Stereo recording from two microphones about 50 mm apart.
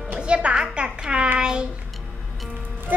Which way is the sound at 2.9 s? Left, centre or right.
Right.